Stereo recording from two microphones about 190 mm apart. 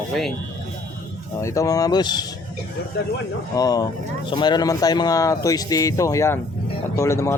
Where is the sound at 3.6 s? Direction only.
20° left (ahead or behind).